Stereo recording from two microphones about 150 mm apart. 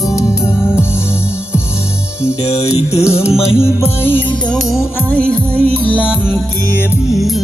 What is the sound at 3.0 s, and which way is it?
Music, 15° left (ahead or behind).